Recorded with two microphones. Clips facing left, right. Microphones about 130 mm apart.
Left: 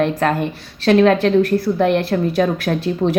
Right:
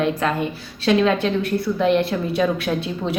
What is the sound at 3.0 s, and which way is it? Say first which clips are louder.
Speech: left 9 dB; 25° left (ahead or behind).